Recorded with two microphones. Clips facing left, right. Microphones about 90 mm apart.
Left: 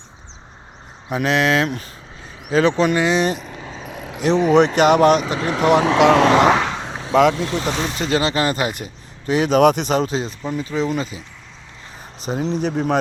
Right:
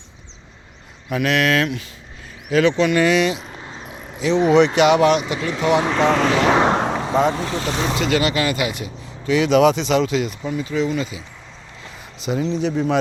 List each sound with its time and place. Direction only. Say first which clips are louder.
1.1 s speech: left 1 dB; 30° left (ahead or behind)
2.9 s speech: right 2 dB; 25° left (ahead or behind)
3.2 s speech: even; 45° left (ahead or behind)
3.8 s a sound: left 4 dB; 90° left
4.2 s speech: even; 50° left (ahead or behind); by 6.3 s 75° left (ahead or behind)
6.7 s a sound: right 9 dB; 75° right (ahead or behind)
7.1 s speech: left 6 dB; 90° left
7.9 s speech: even; 35° left (ahead or behind)
12.2 s speech: right 1 dB; 40° left (ahead or behind)